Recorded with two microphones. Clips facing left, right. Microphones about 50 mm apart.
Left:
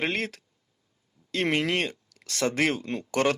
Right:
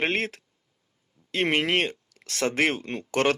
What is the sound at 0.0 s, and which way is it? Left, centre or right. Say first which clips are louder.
Speech: right 2 dB; right.